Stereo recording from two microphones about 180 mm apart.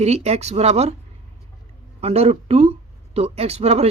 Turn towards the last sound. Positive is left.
turn(degrees=-35)  # may be behind; listen again after turning